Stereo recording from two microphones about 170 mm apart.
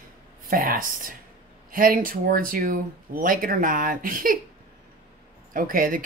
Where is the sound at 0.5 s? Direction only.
55° right (ahead or behind).